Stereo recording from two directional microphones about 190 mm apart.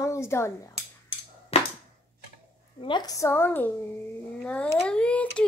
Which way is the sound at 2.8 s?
20° left (ahead or behind).